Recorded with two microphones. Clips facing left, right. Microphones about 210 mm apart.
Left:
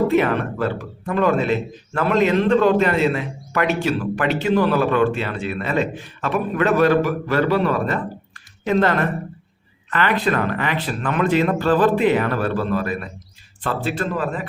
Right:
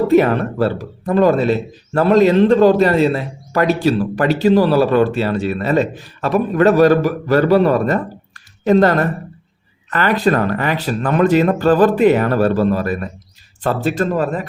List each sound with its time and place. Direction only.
0.1 s a man's voice: 40° right (ahead or behind)